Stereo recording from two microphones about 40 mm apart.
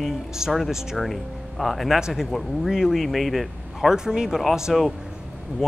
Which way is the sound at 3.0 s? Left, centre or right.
Centre.